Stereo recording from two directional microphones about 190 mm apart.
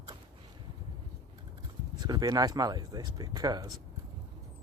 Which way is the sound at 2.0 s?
20° right (ahead or behind).